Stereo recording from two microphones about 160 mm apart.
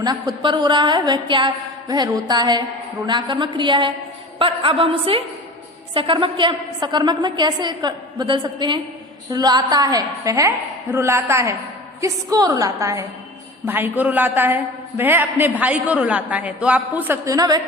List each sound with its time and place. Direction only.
0.0 s a woman's voice: 25° right (ahead or behind)